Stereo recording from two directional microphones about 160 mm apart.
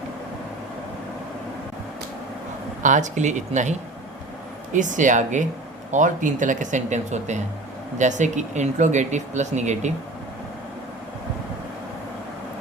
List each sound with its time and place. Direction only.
2.8 s speech: 50° right (ahead or behind)